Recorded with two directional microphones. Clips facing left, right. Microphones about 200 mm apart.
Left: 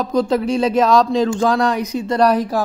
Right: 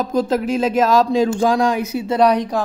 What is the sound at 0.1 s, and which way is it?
Speech, 5° right (ahead or behind).